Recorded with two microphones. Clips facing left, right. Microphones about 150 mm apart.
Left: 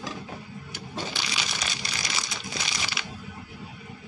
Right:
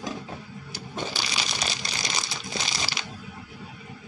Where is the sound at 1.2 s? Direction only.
30° right (ahead or behind).